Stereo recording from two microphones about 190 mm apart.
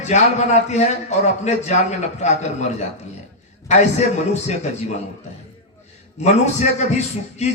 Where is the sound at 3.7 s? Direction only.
35° left (ahead or behind).